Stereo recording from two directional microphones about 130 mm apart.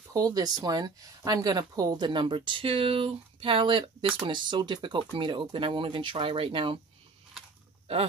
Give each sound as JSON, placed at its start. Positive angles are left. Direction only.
{"t": 0.1, "sound": "speech", "side_deg": -30}